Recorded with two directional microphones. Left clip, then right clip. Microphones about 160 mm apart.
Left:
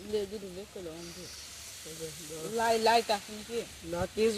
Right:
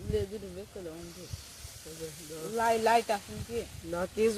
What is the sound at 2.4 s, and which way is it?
Speech, 15° right (ahead or behind).